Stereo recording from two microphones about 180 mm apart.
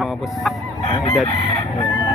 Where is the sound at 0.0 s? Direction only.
Centre (ahead or behind).